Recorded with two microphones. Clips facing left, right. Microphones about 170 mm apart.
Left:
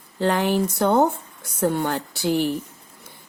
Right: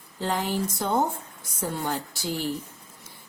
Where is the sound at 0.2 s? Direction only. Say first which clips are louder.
Left 7 dB; 70° left (ahead or behind).